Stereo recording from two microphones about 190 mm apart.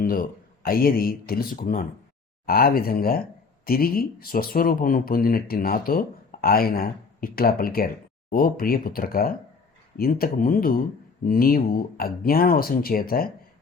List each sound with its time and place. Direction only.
0.0 s speech: 50° left (ahead or behind)